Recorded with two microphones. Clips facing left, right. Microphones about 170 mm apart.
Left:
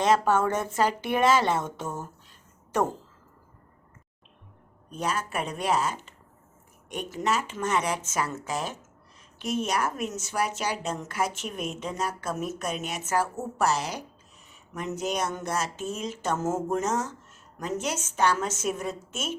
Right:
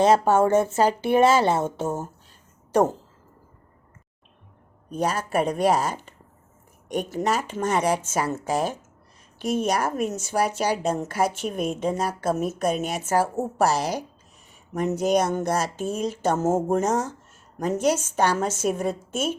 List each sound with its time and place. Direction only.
0.0 s a woman's voice: 30° right (ahead or behind)
4.9 s a woman's voice: 35° right (ahead or behind)